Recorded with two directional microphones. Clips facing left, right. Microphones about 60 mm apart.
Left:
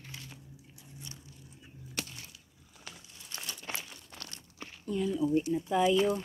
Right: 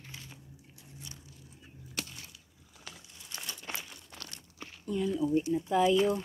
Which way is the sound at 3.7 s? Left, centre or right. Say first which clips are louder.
Even; centre.